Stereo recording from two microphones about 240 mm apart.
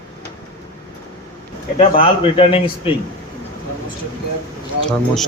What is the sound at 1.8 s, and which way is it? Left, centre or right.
Speech, left.